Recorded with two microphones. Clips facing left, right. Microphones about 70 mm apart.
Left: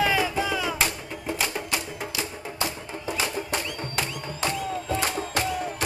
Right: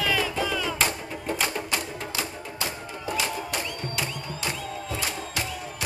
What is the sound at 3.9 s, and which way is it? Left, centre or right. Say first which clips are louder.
Music: left 2 dB; left.